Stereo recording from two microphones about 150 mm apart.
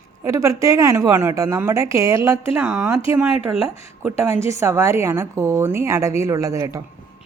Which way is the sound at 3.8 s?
15° right (ahead or behind).